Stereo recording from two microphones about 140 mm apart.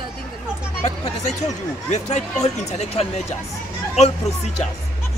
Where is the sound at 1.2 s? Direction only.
55° left (ahead or behind).